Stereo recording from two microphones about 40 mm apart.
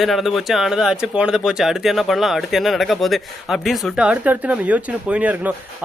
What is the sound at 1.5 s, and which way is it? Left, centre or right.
Speech, centre.